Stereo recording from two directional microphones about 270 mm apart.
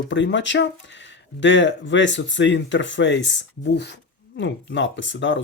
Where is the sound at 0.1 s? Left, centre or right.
Left.